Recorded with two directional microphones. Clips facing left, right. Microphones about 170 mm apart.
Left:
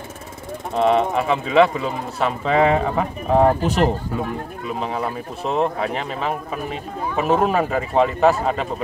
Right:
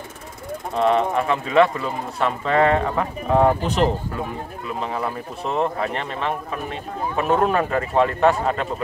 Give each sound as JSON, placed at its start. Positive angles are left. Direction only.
{"t": 0.7, "sound": "speech", "side_deg": 0}